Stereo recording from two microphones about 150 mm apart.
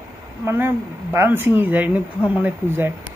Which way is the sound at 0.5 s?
15° right (ahead or behind).